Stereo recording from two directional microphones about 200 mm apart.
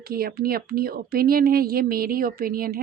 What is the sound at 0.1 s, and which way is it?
A woman's voice, 50° right (ahead or behind).